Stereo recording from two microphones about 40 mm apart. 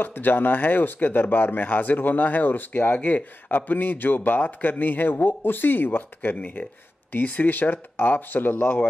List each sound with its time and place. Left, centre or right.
0.0 s speech: left
3.5 s speech: left